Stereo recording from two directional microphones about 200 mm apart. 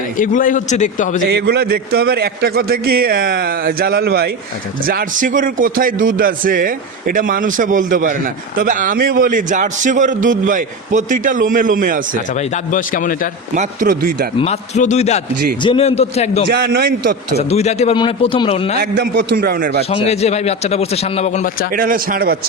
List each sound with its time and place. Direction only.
0.2 s a man's voice: 40° left (ahead or behind)
1.3 s a man's voice: 55° right (ahead or behind)
12.3 s a man's voice: 40° left (ahead or behind)
13.5 s a man's voice: 40° right (ahead or behind)
14.3 s a man's voice: 30° left (ahead or behind)
16.5 s a man's voice: 50° right (ahead or behind)
17.3 s a man's voice: 30° left (ahead or behind)
18.8 s a man's voice: 50° right (ahead or behind)
19.9 s a man's voice: 30° left (ahead or behind)
21.7 s a man's voice: 45° right (ahead or behind)